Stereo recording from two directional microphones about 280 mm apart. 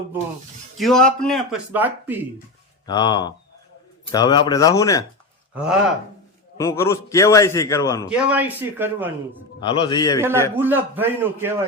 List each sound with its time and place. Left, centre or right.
0.8 s speech: centre
2.8 s a man's voice: centre
6.6 s a man's voice: centre
8.1 s speech: centre
9.6 s a man's voice: centre
10.2 s a man's voice: centre